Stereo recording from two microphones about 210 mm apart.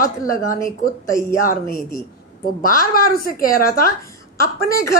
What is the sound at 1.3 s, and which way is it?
A woman's voice, 45° left (ahead or behind).